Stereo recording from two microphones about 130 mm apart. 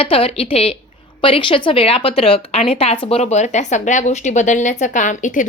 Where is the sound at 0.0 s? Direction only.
45° left (ahead or behind).